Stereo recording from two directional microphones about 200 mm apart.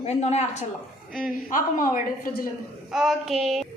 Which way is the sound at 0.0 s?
35° left (ahead or behind).